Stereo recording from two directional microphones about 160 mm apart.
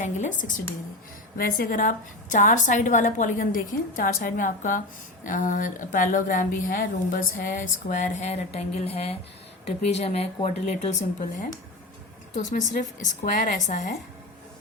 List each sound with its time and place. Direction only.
0.0 s a woman's voice: 50° left (ahead or behind)
1.4 s a woman's voice: 65° left (ahead or behind)